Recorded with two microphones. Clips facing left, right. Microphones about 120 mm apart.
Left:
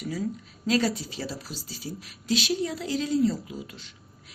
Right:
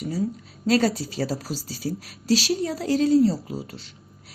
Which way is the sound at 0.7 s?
40° right (ahead or behind).